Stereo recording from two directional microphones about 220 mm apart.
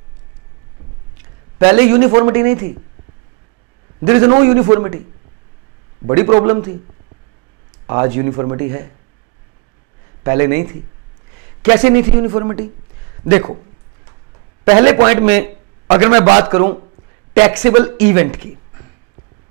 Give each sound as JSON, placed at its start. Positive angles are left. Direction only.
{"t": 1.6, "sound": "speech", "side_deg": -15}
{"t": 4.4, "sound": "speech", "side_deg": -15}
{"t": 6.0, "sound": "a man's voice", "side_deg": -20}
{"t": 7.8, "sound": "speech", "side_deg": -15}
{"t": 10.2, "sound": "a man's voice", "side_deg": -15}
{"t": 15.0, "sound": "speech", "side_deg": -10}
{"t": 15.9, "sound": "a man's voice", "side_deg": -25}